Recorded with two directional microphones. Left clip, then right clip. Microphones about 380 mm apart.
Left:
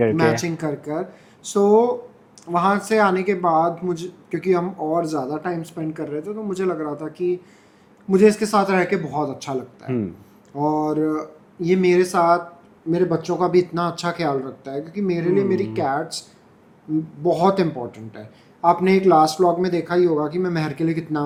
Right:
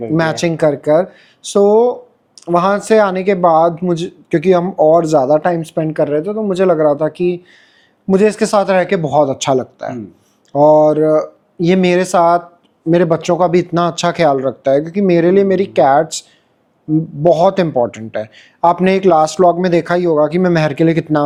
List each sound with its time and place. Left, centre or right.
0.2 s a man's voice: right
17.2 s a man's voice: right